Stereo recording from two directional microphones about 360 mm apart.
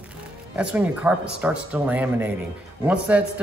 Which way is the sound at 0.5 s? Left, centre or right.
Centre.